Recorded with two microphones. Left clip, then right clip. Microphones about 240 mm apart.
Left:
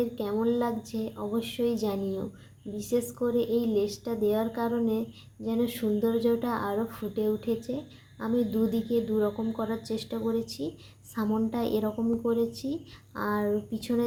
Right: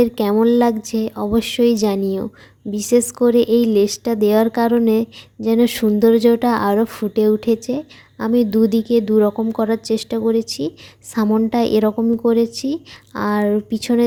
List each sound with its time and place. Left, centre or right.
0.0 s a woman's voice: right